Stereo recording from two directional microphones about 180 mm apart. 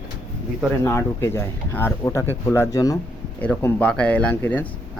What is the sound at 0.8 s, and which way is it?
Speech, 15° left (ahead or behind).